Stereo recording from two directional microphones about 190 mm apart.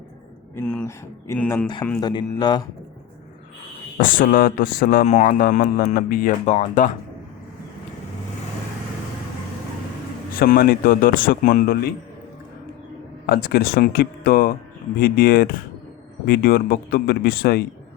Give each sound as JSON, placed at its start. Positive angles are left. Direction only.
{"t": 0.5, "sound": "speech", "side_deg": 5}
{"t": 2.0, "sound": "speech", "side_deg": 20}
{"t": 3.9, "sound": "speech", "side_deg": 45}
{"t": 10.4, "sound": "speech", "side_deg": 50}
{"t": 13.2, "sound": "speech", "side_deg": 55}